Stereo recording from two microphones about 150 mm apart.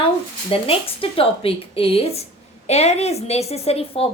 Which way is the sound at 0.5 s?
40° left (ahead or behind).